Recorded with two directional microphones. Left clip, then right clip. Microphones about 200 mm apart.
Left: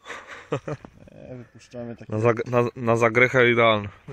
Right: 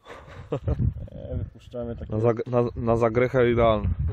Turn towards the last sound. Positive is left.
turn(degrees=-10)  # may be behind; listen again after turning